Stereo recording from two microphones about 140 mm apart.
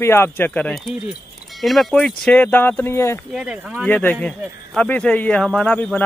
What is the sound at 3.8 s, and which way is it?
Speech, 10° left (ahead or behind).